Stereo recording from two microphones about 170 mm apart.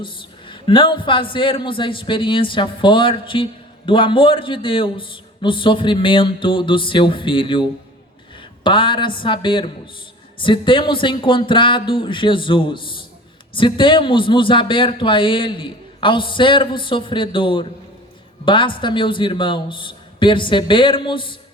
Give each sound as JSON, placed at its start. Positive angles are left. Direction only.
{"t": 0.0, "sound": "speech", "side_deg": 30}